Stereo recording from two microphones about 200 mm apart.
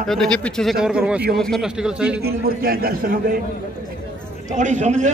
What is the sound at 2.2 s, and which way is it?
A man's voice, 50° right (ahead or behind).